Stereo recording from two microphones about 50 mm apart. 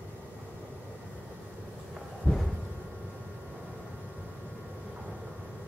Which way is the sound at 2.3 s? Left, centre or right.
Centre.